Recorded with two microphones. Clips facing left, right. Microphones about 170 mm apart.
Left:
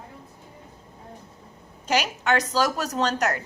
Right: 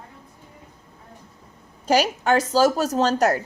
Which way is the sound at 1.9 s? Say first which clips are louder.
Right 4 dB; 35° right (ahead or behind).